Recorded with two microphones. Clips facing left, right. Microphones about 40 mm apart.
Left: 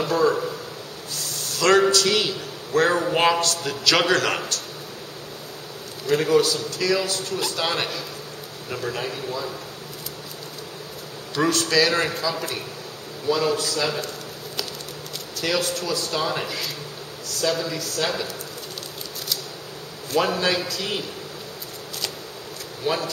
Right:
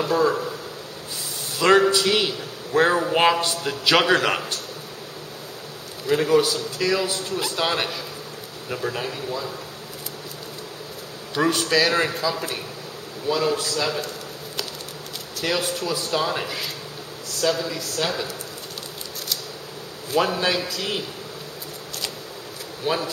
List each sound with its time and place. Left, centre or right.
0.0 s a man's voice: centre
1.1 s a sound: centre
1.9 s a man's voice: centre
3.3 s a man's voice: centre
6.0 s a man's voice: centre
11.3 s a man's voice: centre
15.4 s a man's voice: centre
20.1 s a man's voice: centre
22.8 s a man's voice: centre